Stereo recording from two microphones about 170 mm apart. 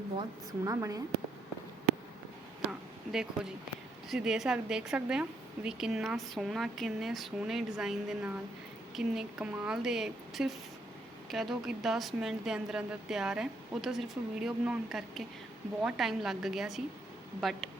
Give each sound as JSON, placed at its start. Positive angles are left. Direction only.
{"t": 0.2, "sound": "a woman's voice", "side_deg": -20}
{"t": 2.6, "sound": "a sound", "side_deg": -5}
{"t": 4.1, "sound": "a woman's voice", "side_deg": 0}